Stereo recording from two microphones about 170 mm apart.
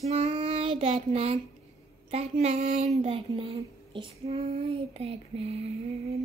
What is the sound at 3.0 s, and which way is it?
A woman's voice, 30° right (ahead or behind).